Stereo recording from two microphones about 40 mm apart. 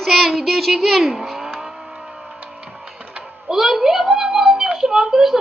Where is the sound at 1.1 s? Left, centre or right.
Centre.